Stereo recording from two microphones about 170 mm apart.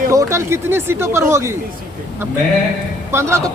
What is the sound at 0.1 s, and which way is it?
Speech, 15° right (ahead or behind).